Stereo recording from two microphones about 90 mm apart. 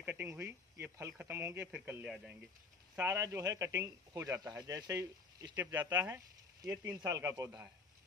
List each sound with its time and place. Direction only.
0.0 s speech: 15° right (ahead or behind)
1.9 s speech: 10° right (ahead or behind)
3.0 s speech: 30° right (ahead or behind)
5.6 s speech: 20° right (ahead or behind)
6.6 s speech: 45° right (ahead or behind)
7.3 s speech: 35° right (ahead or behind)